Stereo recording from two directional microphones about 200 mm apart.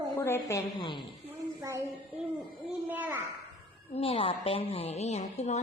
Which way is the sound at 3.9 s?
30° left (ahead or behind).